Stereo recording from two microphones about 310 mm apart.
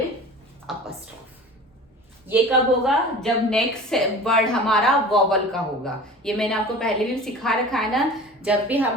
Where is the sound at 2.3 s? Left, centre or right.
Centre.